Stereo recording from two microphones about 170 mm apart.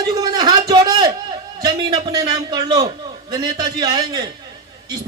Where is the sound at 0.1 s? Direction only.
25° right (ahead or behind).